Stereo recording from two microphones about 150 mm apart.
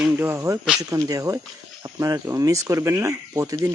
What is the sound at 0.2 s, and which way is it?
Speech, 15° right (ahead or behind).